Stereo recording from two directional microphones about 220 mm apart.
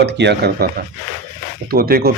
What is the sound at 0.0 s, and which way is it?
Speech, 50° right (ahead or behind).